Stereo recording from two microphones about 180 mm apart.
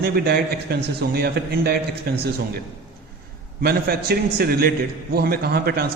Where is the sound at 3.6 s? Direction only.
60° right (ahead or behind).